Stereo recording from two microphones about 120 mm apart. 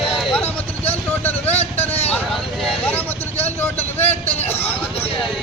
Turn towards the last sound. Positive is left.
turn(degrees=15)  # may be behind; listen again after turning